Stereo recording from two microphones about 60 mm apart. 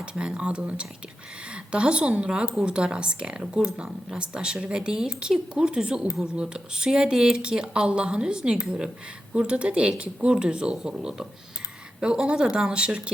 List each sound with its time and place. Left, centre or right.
0.0 s speech: centre